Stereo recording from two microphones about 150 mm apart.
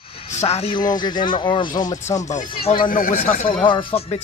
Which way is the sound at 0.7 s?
30° left (ahead or behind).